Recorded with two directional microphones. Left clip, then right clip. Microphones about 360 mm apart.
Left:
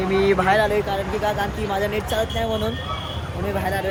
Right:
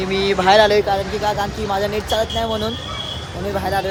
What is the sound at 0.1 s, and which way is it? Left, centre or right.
Speech, centre.